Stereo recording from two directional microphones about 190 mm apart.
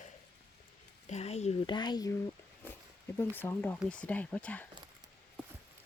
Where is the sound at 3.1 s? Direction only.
10° left (ahead or behind).